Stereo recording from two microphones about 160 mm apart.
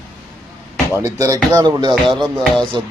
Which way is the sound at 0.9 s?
20° right (ahead or behind).